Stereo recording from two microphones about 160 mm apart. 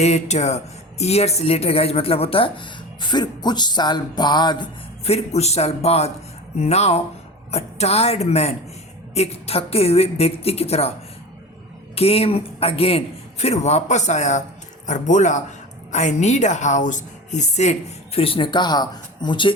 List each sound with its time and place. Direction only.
0.0 s speech: 45° left (ahead or behind); by 4.6 s 25° left (ahead or behind)
5.0 s speech: 40° left (ahead or behind)
11.9 s a woman's voice: 40° left (ahead or behind)